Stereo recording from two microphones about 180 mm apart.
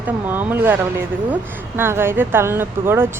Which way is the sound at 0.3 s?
10° right (ahead or behind).